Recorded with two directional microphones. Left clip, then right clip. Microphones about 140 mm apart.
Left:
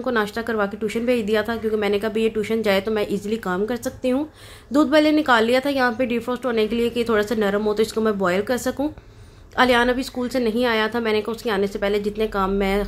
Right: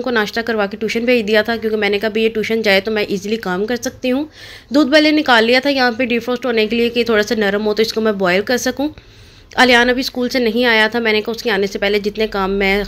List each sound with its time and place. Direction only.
0.0 s speech: 15° right (ahead or behind)